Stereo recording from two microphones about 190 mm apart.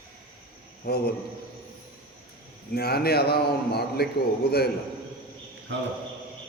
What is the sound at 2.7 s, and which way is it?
A man's voice, 55° left (ahead or behind).